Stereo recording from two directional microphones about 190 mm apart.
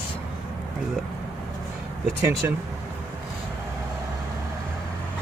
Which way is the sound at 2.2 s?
15° right (ahead or behind).